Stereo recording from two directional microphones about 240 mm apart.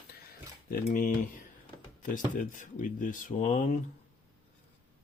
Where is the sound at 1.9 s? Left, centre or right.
Left.